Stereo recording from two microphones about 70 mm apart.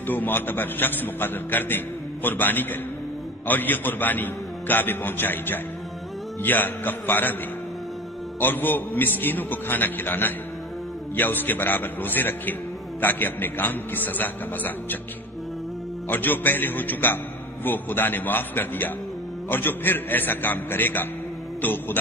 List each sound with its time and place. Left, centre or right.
0.0 s a man's voice: left
8.4 s a man's voice: left
16.1 s a man's voice: left
21.5 s music: left